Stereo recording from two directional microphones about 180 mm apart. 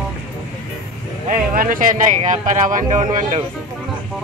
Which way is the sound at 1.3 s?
50° right (ahead or behind).